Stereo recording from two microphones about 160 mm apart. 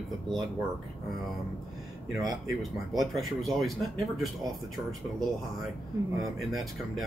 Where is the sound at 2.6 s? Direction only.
Centre (ahead or behind).